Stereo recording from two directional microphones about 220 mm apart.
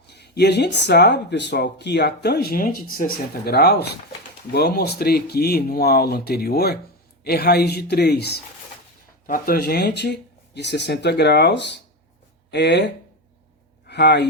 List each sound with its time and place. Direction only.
0.1 s speech: 50° left (ahead or behind)